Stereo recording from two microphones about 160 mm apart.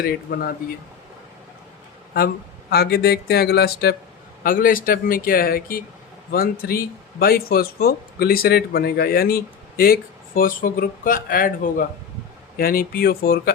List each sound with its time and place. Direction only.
0.0 s speech: 70° left (ahead or behind)
2.1 s speech: 75° left (ahead or behind)
4.4 s speech: 60° left (ahead or behind)